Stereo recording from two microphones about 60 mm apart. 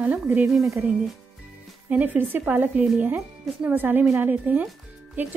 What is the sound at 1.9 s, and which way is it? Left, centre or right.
A woman's voice, right.